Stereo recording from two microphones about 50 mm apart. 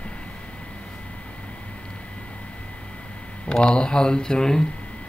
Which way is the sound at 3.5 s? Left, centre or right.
Centre.